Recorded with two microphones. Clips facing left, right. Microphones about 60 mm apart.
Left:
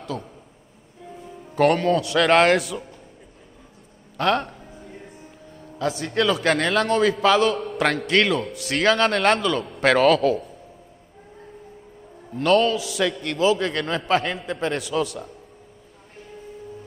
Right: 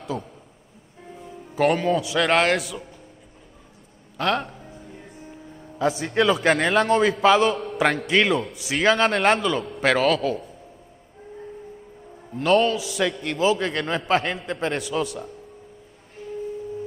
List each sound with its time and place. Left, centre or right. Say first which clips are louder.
0.0 s a man's voice: right 1 dB; centre
1.3 s a man's voice: left 2 dB; centre
4.2 s music: left 2 dB; centre
5.8 s a man's voice: right 2 dB; centre
12.4 s a man's voice: left 1 dB; centre